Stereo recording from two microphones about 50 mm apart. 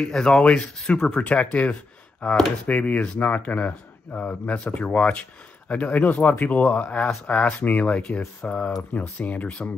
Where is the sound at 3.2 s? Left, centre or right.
Left.